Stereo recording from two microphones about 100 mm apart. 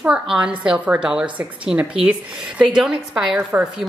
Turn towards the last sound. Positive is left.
turn(degrees=-15)  # may be behind; listen again after turning